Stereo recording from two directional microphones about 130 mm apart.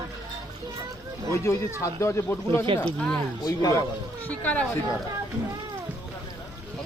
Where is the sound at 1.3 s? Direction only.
20° left (ahead or behind).